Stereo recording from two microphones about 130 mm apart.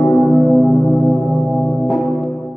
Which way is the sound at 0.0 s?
5° right (ahead or behind).